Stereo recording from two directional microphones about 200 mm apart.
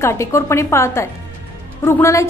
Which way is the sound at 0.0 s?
15° left (ahead or behind).